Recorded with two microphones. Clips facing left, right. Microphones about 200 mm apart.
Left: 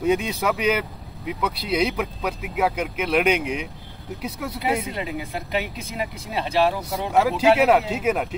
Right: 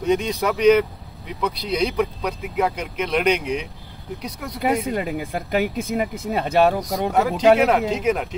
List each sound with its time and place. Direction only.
0.0 s speech: 5° left (ahead or behind)
4.6 s speech: 50° right (ahead or behind)
7.1 s speech: 5° left (ahead or behind)